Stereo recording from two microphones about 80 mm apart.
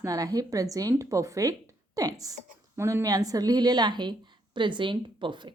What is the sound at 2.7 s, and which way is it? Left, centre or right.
Speech, right.